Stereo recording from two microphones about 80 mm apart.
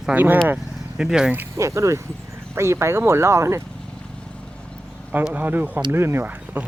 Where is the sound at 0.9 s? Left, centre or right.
Centre.